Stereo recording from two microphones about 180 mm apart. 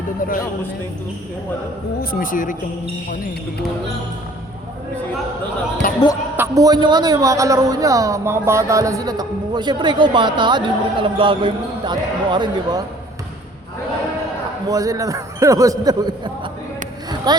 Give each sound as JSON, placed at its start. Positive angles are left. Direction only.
{"t": 2.0, "sound": "speech", "side_deg": 55}
{"t": 5.8, "sound": "speech", "side_deg": 50}
{"t": 6.3, "sound": "a man's voice", "side_deg": -15}
{"t": 14.7, "sound": "a man's voice", "side_deg": -20}